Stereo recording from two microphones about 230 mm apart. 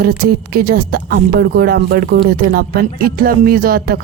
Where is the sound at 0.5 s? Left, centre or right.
Right.